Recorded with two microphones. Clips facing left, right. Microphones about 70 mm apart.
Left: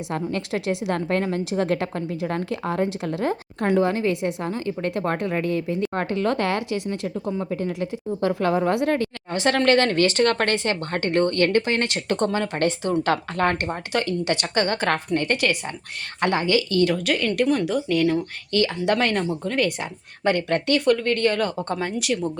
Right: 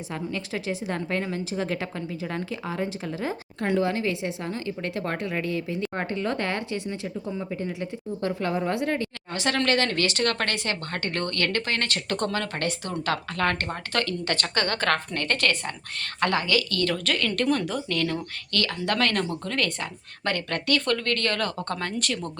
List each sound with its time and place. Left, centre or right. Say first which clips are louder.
0.1 s a woman's voice: left 5 dB; left
9.3 s speech: left 6 dB; left; by 22.3 s centre